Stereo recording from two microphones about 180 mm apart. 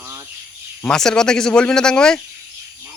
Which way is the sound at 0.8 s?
5° left (ahead or behind).